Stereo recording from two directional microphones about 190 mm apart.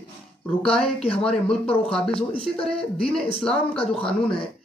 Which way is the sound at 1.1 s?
5° left (ahead or behind).